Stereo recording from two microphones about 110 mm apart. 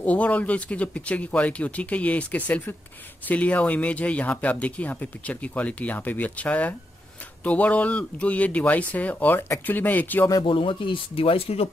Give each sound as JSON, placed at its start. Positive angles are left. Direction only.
{"t": 0.0, "sound": "speech", "side_deg": 15}
{"t": 10.4, "sound": "speech", "side_deg": 50}